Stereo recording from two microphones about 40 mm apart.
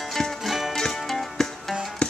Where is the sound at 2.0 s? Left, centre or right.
Left.